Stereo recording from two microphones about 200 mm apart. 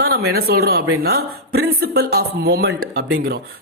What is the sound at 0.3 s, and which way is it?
A woman's voice, 50° right (ahead or behind).